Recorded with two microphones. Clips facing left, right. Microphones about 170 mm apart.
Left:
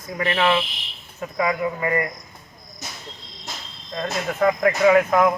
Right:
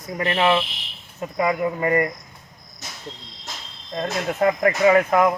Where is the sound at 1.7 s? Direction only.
40° right (ahead or behind).